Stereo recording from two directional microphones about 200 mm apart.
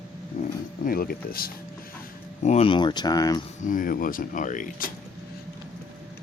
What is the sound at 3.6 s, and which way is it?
Speech, 40° left (ahead or behind).